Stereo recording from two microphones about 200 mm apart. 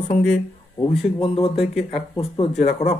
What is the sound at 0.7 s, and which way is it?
Speech, 25° left (ahead or behind).